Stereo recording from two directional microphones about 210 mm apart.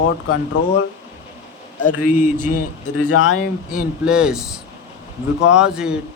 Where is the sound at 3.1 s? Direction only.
90° left.